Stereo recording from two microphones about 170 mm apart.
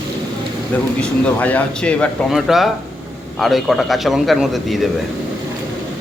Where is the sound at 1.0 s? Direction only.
10° left (ahead or behind).